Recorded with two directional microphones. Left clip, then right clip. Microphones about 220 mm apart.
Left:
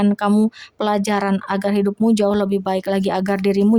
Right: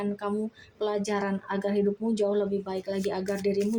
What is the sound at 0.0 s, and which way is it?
Speech, 40° left (ahead or behind).